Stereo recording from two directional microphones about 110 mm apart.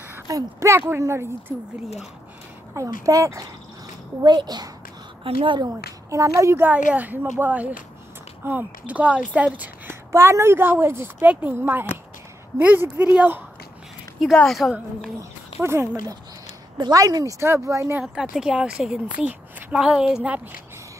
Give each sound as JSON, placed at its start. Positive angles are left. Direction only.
{"t": 0.3, "sound": "a woman's voice", "side_deg": -25}
{"t": 2.7, "sound": "a woman's voice", "side_deg": -30}
{"t": 5.2, "sound": "speech", "side_deg": -55}
{"t": 5.7, "sound": "a woman's voice", "side_deg": -30}
{"t": 14.3, "sound": "a woman's voice", "side_deg": 5}
{"t": 15.6, "sound": "a woman's voice", "side_deg": -25}
{"t": 16.7, "sound": "speech", "side_deg": -35}
{"t": 18.0, "sound": "a woman's voice", "side_deg": -5}